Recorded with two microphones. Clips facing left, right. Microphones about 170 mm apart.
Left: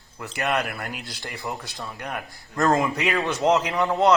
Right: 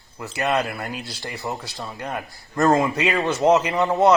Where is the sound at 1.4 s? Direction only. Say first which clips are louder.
Right 2 dB; 20° right (ahead or behind).